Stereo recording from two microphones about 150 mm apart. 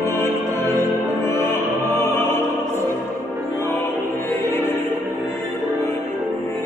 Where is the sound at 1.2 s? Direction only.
15° left (ahead or behind).